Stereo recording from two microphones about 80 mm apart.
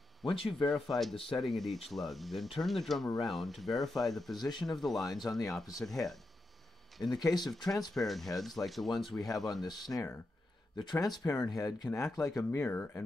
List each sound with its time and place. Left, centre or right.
0.2 s speech: left
0.7 s speech: centre
4.4 s speech: left
4.6 s speech: centre
5.0 s speech: left
5.9 s speech: centre
7.2 s speech: left
7.5 s speech: centre
9.5 s speech: left
12.6 s speech: left